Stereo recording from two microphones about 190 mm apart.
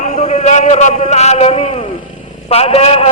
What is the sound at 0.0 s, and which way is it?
A man's voice, 35° left (ahead or behind).